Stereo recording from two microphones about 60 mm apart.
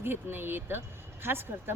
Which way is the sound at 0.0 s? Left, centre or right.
Right.